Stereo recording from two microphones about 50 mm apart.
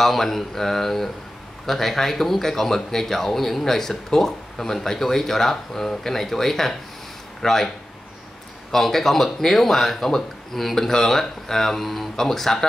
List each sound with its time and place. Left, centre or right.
0.0 s speech: centre
8.7 s speech: centre